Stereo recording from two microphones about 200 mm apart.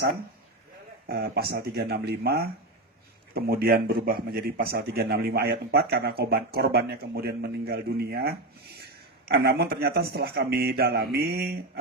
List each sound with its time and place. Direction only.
1.0 s a man's voice: 50° right (ahead or behind)